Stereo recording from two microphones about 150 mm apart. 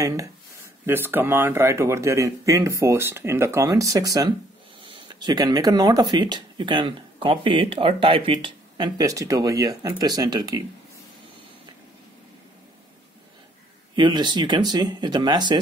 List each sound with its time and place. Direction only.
0.0 s speech: 20° right (ahead or behind)
13.9 s speech: 30° right (ahead or behind)